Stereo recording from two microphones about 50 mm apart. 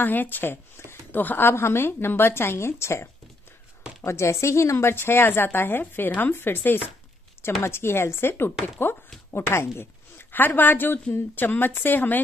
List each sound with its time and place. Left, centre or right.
0.0 s speech: left
1.1 s a woman's voice: left
1.5 s a woman's voice: left
7.6 s a woman's voice: left